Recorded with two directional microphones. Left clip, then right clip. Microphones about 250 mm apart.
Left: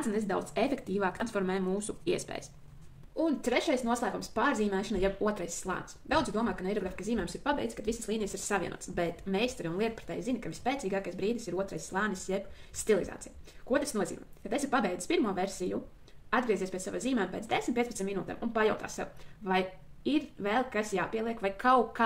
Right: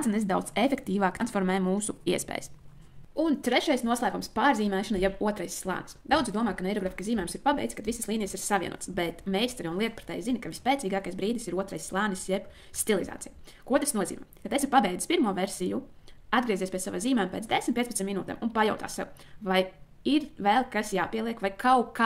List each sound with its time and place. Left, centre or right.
0.0 s speech: right
3.2 s speech: right